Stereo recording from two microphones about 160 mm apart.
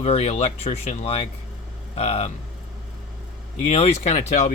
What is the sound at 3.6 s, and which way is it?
Speech, 40° left (ahead or behind).